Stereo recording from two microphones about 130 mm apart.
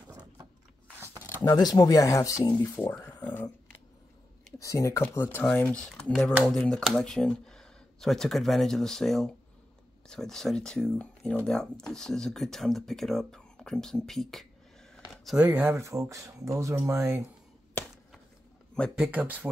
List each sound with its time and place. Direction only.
0.9 s a sound: 20° right (ahead or behind)
1.4 s speech: 30° left (ahead or behind)
3.2 s a sound: 10° left (ahead or behind)
4.6 s speech: 25° left (ahead or behind); by 14.5 s centre (ahead or behind)
15.4 s speech: 15° right (ahead or behind)
19.0 s speech: 10° right (ahead or behind)